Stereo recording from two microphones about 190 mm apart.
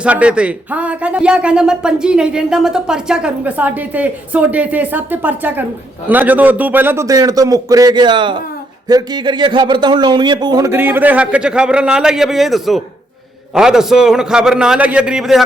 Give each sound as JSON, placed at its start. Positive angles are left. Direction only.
{"t": 0.0, "sound": "a man's voice", "side_deg": -5}